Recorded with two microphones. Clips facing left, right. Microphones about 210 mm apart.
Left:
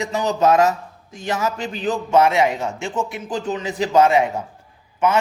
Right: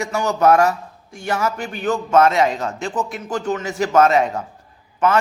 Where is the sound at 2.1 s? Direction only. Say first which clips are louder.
Right 1 dB; 10° left (ahead or behind).